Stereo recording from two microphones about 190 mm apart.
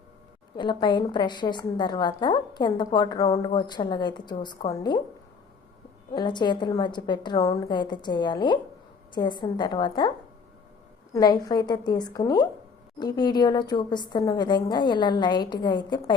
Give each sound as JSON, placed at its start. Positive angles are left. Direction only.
{"t": 0.5, "sound": "a woman's voice", "side_deg": 25}
{"t": 6.1, "sound": "a woman's voice", "side_deg": 25}
{"t": 11.1, "sound": "a woman's voice", "side_deg": 20}